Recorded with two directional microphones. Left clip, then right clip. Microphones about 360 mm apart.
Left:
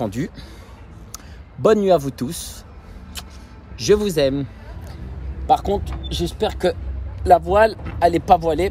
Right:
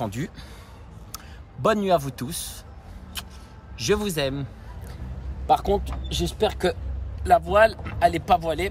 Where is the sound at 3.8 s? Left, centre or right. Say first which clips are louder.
Left 7 dB; centre.